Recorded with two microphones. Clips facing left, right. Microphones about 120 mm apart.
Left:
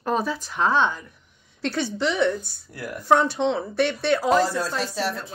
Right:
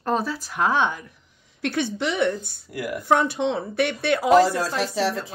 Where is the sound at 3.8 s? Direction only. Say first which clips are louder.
Left 1 dB; 55° right (ahead or behind).